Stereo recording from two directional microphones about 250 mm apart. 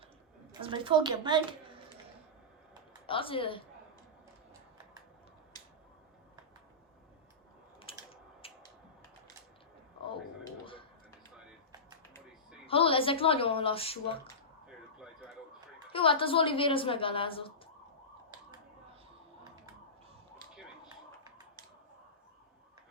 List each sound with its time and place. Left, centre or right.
0.6 s a woman's voice: centre
3.1 s speech: left
5.5 s a sound: centre
7.8 s typing: left
12.6 s a woman's voice: left
15.9 s speech: left